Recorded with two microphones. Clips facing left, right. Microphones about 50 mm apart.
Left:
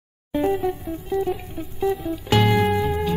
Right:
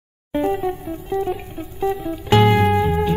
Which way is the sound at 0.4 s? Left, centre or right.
Centre.